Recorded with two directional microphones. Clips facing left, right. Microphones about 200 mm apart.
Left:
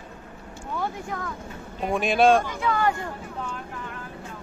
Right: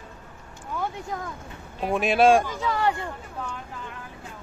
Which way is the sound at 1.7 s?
Centre (ahead or behind).